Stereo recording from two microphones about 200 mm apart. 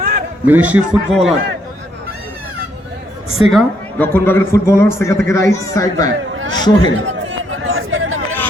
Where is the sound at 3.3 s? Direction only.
Centre (ahead or behind); by 6.1 s 15° left (ahead or behind).